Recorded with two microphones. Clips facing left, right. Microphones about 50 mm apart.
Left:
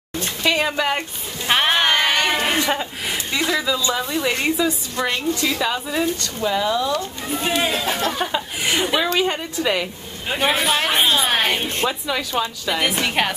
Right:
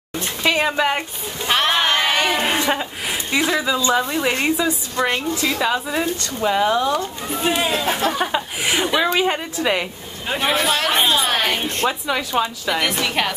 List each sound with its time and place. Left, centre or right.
0.4 s a woman's voice: centre
1.5 s sheep: centre
2.2 s a woman's voice: centre
6.4 s speech: right
7.2 s a woman's voice: centre
8.3 s chuckle: centre
9.1 s a woman's voice: centre
10.2 s a woman's voice: centre
12.1 s a woman's voice: centre
13.0 s a woman's voice: centre